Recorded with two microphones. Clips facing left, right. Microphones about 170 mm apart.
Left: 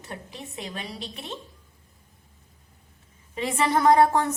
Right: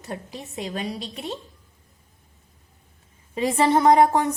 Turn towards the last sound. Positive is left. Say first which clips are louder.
# right 2 dB
turn(degrees=-15)  # may be behind; listen again after turning